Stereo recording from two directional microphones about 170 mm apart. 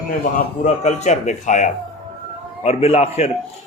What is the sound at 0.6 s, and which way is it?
A man's voice, 40° left (ahead or behind).